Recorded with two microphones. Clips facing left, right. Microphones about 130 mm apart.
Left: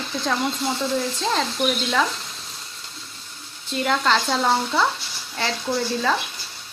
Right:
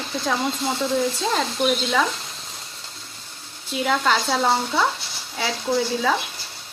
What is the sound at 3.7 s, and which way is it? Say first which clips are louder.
Speech: even; 5° right (ahead or behind).